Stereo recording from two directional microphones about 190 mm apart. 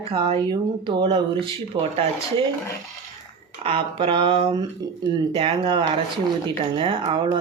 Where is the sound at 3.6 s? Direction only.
30° right (ahead or behind).